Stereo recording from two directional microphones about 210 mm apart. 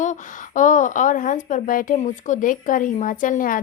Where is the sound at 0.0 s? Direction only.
35° left (ahead or behind).